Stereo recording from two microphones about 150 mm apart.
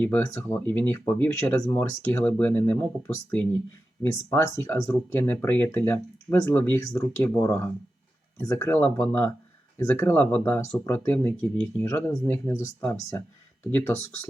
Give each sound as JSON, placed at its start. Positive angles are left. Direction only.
{"t": 0.0, "sound": "speech", "side_deg": 15}
{"t": 4.0, "sound": "speech", "side_deg": 20}